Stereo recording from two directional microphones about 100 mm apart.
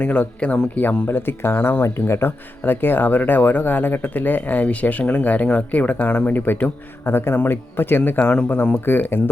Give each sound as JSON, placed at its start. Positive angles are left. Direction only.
{"t": 0.0, "sound": "speech", "side_deg": 15}
{"t": 8.7, "sound": "speech", "side_deg": 20}